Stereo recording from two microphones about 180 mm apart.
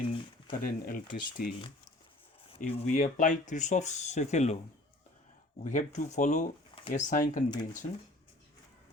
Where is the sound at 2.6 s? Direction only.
40° left (ahead or behind).